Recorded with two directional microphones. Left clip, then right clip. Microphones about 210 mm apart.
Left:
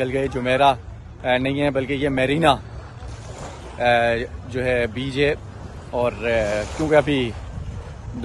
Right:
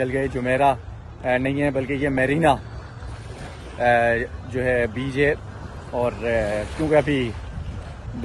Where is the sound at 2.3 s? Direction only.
5° left (ahead or behind).